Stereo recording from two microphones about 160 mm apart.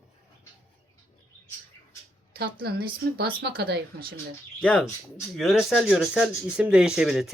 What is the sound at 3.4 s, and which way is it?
Speech, 90° right.